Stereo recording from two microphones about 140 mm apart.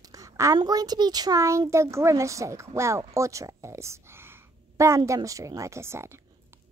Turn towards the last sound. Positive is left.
turn(degrees=-20)  # may be behind; listen again after turning